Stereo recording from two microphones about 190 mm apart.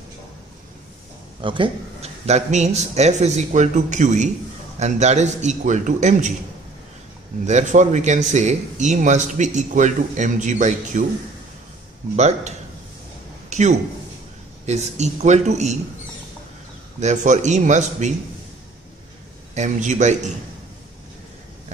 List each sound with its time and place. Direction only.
1.4 s speech: 25° right (ahead or behind)
7.4 s speech: 40° right (ahead or behind)
12.2 s speech: 35° right (ahead or behind)
13.5 s a sound: 40° right (ahead or behind)
14.7 s speech: 35° right (ahead or behind)
17.0 s speech: 40° right (ahead or behind)
19.5 s speech: 40° right (ahead or behind)